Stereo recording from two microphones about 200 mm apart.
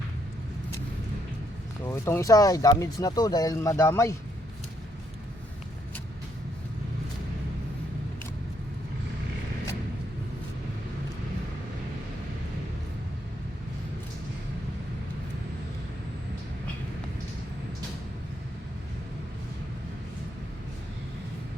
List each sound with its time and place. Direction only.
1.9 s speech: 15° left (ahead or behind)